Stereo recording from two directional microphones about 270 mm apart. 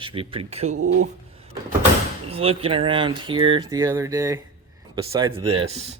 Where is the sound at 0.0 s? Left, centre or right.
Centre.